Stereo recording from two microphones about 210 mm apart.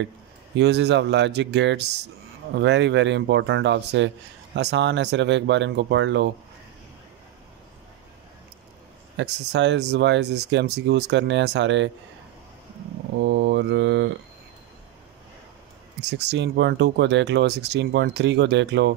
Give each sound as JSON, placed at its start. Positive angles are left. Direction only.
{"t": 0.6, "sound": "speech", "side_deg": -55}
{"t": 9.1, "sound": "speech", "side_deg": -55}
{"t": 13.2, "sound": "speech", "side_deg": -55}
{"t": 16.0, "sound": "speech", "side_deg": -55}